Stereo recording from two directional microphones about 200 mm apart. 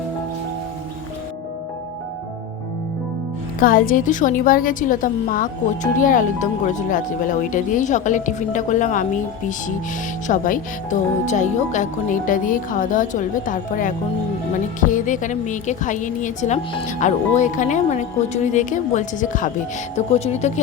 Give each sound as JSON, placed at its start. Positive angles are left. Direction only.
{"t": 3.6, "sound": "a woman's voice", "side_deg": 45}
{"t": 10.2, "sound": "a woman's voice", "side_deg": 40}